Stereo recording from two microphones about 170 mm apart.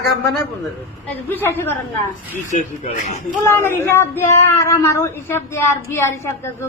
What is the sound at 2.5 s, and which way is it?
Speech, 45° left (ahead or behind).